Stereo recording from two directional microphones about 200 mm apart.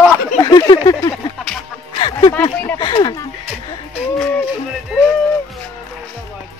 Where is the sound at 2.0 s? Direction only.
25° left (ahead or behind).